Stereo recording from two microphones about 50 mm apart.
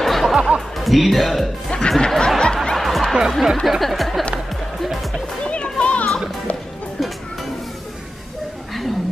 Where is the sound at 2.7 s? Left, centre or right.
Centre.